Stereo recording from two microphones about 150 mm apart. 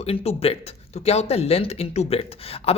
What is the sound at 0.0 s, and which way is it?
Speech, 45° left (ahead or behind).